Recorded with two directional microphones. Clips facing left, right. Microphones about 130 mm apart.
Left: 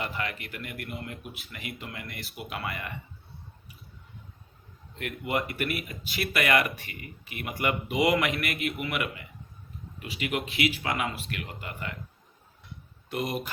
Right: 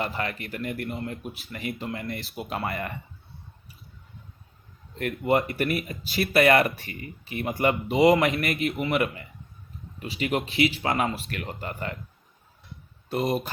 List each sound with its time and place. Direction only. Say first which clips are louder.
0.0 s speech: right 4 dB; 40° right (ahead or behind)
0.7 s speech: right 7 dB; 25° right (ahead or behind)
4.9 s speech: right 7 dB; 40° right (ahead or behind)
5.4 s speech: right 5 dB; 30° right (ahead or behind)
13.1 s speech: right 5 dB; 30° right (ahead or behind)